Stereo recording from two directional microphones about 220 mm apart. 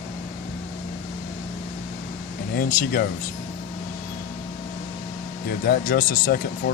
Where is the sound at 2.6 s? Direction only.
45° left (ahead or behind).